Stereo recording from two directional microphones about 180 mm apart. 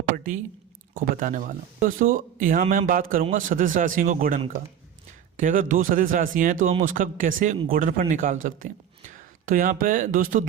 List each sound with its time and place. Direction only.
0.9 s speech: 50° right (ahead or behind)
5.4 s a man's voice: 45° right (ahead or behind)